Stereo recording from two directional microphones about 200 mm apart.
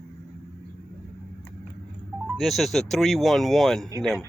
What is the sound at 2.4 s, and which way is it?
Speech, centre (ahead or behind).